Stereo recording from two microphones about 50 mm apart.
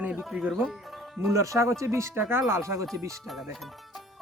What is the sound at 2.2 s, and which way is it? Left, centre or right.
Speech, right.